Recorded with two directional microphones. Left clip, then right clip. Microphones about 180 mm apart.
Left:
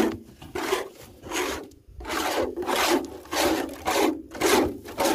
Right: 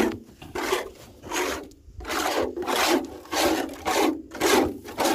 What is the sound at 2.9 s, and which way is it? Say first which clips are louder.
Rub: right 1 dB; 15° left (ahead or behind).